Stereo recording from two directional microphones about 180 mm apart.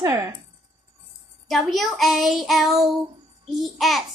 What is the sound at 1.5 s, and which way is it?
Child singing, centre (ahead or behind).